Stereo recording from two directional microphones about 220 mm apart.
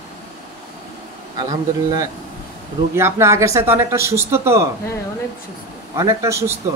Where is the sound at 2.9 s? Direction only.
10° right (ahead or behind).